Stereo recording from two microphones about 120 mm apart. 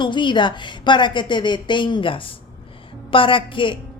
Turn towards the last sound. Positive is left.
turn(degrees=45)  # may be behind; listen again after turning